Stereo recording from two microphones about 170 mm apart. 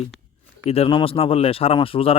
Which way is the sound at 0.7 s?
30° left (ahead or behind).